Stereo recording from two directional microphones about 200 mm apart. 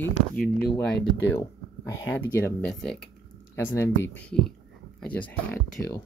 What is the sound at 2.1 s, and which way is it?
Speech, 10° left (ahead or behind).